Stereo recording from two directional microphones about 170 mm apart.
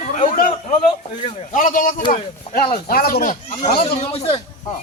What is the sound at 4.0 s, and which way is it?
Speech, 35° left (ahead or behind).